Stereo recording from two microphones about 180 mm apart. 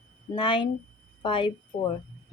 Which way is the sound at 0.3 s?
30° left (ahead or behind).